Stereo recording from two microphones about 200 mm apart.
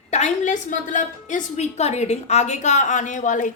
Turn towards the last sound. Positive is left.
turn(degrees=40)  # may be behind; listen again after turning